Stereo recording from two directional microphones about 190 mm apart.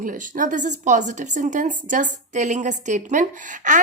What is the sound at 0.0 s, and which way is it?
A woman's voice, 45° right (ahead or behind).